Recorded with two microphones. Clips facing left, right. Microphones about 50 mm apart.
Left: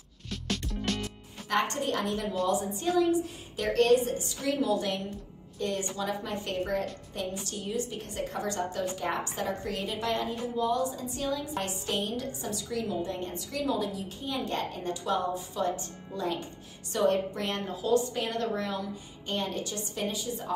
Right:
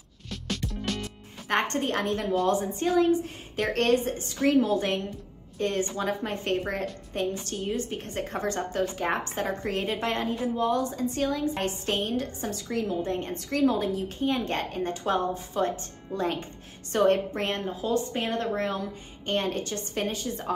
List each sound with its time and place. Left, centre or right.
0.3 s music: centre
1.5 s a woman's voice: right